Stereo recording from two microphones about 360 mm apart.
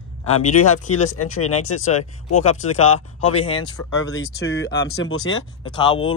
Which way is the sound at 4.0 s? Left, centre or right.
Left.